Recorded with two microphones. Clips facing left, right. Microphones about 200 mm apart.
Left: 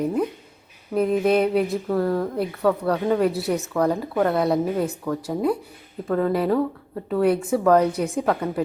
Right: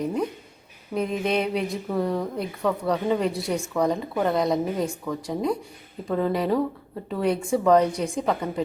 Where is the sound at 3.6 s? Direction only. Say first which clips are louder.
Even; 10° right (ahead or behind).